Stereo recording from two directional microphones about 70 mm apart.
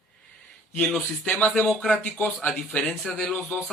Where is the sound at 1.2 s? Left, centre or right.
Centre.